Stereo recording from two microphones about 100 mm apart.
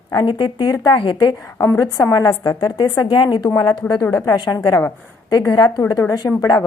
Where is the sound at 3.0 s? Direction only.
50° left (ahead or behind).